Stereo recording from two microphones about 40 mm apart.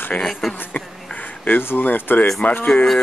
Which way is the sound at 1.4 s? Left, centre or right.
Left.